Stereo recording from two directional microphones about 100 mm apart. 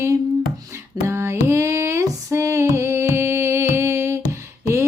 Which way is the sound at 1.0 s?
25° right (ahead or behind).